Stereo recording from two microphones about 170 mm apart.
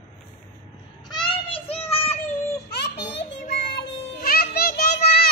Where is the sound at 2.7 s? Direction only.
80° left.